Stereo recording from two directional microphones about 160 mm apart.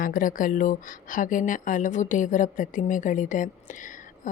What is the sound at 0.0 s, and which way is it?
Speech, 55° left (ahead or behind).